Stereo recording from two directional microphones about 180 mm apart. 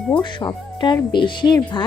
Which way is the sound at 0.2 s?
25° left (ahead or behind).